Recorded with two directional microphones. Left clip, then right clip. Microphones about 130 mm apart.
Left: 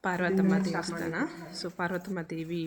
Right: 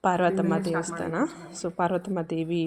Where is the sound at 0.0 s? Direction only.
15° right (ahead or behind).